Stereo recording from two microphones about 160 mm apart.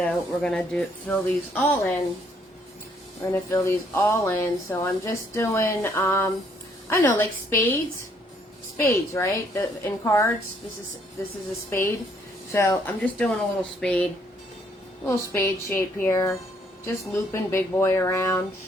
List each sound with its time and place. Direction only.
0.0 s speech: 5° left (ahead or behind)
3.5 s speech: 15° left (ahead or behind)
8.8 s speech: 15° left (ahead or behind)
11.7 s speech: 15° left (ahead or behind)